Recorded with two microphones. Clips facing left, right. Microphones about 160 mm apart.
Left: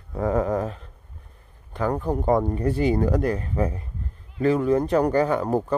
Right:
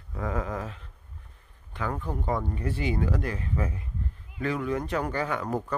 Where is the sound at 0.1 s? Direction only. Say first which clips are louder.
Left 9 dB; 35° left (ahead or behind).